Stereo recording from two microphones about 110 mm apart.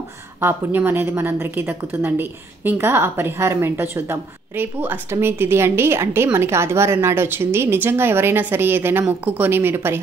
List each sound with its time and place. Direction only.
0.4 s a woman's voice: 20° right (ahead or behind)